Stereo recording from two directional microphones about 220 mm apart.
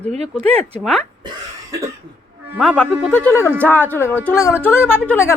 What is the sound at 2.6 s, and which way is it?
A woman's voice, centre (ahead or behind).